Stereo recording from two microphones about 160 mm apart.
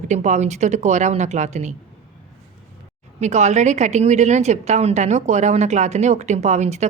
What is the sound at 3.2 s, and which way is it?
A woman's voice, 45° right (ahead or behind).